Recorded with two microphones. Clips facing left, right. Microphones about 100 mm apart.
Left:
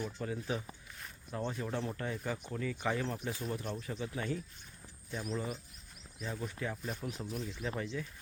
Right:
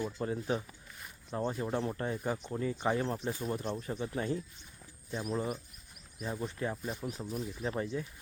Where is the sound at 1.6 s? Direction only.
30° right (ahead or behind).